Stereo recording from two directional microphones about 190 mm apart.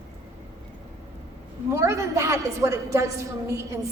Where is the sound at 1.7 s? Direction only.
15° right (ahead or behind).